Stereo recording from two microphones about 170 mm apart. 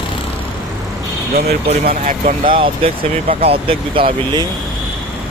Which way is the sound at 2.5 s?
35° right (ahead or behind).